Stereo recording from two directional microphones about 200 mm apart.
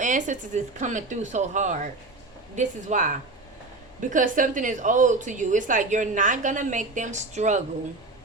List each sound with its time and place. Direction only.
0.0 s a woman's voice: 40° right (ahead or behind)